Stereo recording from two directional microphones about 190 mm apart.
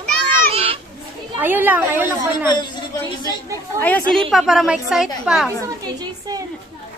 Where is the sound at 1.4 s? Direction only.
10° right (ahead or behind).